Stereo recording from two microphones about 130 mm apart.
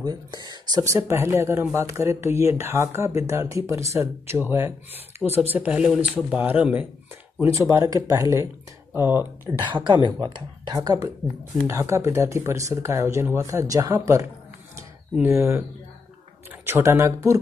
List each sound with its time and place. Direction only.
0.0 s speech: 30° right (ahead or behind)
5.5 s speech: 10° right (ahead or behind)
7.4 s speech: 25° right (ahead or behind)
9.7 s speech: 35° right (ahead or behind)
15.2 s speech: 20° right (ahead or behind)
16.6 s speech: 15° right (ahead or behind)